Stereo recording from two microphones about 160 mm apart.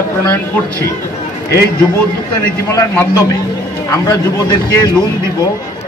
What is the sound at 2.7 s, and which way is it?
A man's voice, 15° left (ahead or behind).